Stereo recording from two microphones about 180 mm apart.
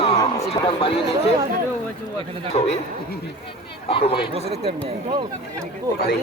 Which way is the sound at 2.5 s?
40° left (ahead or behind).